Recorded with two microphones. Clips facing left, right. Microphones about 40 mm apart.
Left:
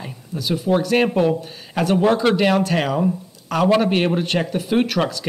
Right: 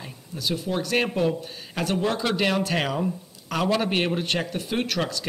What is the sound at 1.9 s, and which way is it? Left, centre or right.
Speech, left.